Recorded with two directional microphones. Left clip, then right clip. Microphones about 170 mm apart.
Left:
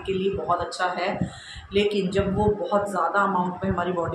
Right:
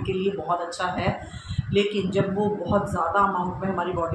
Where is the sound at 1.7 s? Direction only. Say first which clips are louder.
Left 1 dB; 10° left (ahead or behind).